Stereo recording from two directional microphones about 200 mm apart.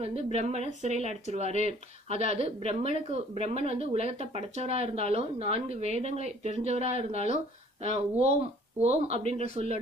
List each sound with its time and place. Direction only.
0.0 s speech: 30° right (ahead or behind)